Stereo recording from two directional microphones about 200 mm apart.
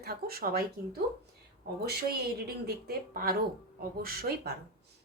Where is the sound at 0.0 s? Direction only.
50° right (ahead or behind).